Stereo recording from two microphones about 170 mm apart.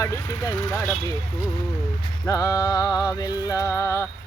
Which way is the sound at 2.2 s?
20° left (ahead or behind).